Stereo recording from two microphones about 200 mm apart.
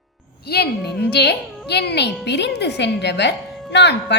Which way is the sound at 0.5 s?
55° left (ahead or behind).